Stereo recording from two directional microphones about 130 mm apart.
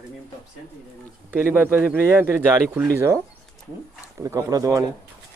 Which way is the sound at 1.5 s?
15° right (ahead or behind).